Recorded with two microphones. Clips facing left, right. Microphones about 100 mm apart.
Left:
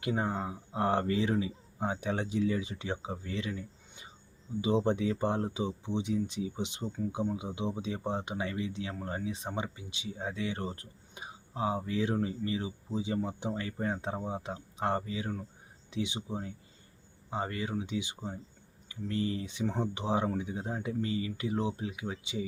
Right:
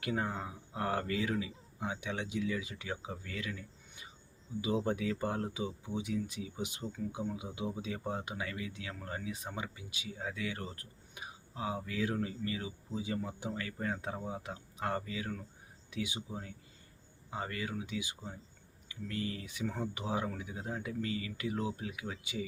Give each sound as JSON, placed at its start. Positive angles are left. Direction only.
{"t": 0.0, "sound": "speech", "side_deg": 25}